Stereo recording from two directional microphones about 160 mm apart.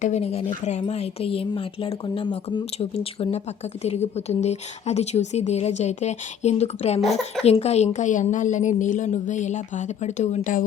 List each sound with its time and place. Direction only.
0.0 s a woman's voice: 45° left (ahead or behind)
7.0 s speech: centre (ahead or behind)
7.4 s a woman's voice: 40° left (ahead or behind)